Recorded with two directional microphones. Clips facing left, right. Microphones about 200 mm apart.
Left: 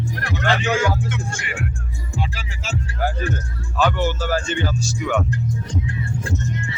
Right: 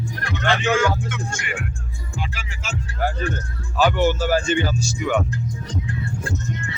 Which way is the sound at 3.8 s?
10° right (ahead or behind).